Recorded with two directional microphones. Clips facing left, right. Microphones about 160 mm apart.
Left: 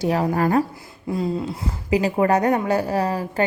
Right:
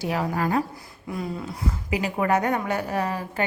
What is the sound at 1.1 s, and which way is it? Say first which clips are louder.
Speech: left 7 dB; 25° left (ahead or behind).